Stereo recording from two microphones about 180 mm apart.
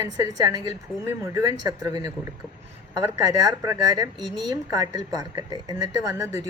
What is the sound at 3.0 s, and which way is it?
Speech, 20° right (ahead or behind).